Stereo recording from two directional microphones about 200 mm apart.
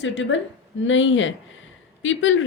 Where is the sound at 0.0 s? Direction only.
65° left (ahead or behind).